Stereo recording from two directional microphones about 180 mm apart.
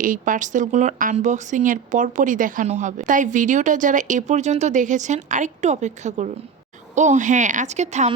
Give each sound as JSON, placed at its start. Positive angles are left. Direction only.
{"t": 0.0, "sound": "speech", "side_deg": -50}